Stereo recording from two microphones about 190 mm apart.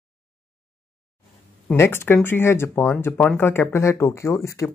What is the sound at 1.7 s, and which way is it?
Speech, 10° left (ahead or behind).